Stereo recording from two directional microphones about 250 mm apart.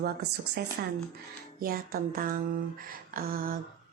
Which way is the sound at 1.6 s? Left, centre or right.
Right.